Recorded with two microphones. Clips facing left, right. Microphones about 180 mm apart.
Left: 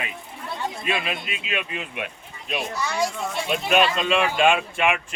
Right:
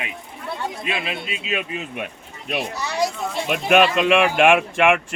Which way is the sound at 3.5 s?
60° right (ahead or behind).